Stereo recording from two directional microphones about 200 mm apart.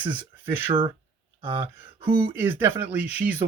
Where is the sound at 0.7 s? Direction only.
25° right (ahead or behind).